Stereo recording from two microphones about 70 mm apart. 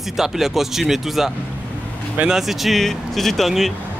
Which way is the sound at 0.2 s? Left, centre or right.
Centre.